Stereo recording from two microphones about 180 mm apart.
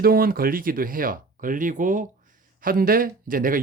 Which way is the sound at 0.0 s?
55° right (ahead or behind).